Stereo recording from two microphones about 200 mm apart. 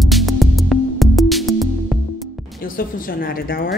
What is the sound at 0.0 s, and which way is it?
Music, centre (ahead or behind).